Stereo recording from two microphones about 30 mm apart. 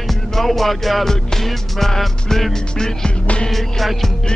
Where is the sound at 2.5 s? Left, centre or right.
Left.